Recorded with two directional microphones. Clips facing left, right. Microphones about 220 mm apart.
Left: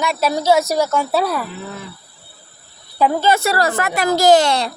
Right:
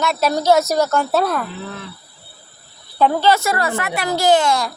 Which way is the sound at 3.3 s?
35° left (ahead or behind).